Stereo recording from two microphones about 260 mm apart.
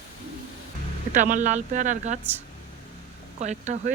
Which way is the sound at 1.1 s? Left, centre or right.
Right.